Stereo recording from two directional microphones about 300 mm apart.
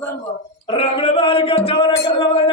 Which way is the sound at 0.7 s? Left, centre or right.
Centre.